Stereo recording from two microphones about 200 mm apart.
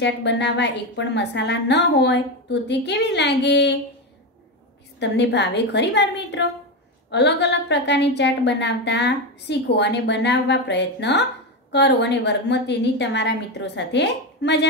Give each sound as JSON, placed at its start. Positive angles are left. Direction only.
{"t": 0.0, "sound": "a woman's voice", "side_deg": 60}
{"t": 4.9, "sound": "a woman's voice", "side_deg": 60}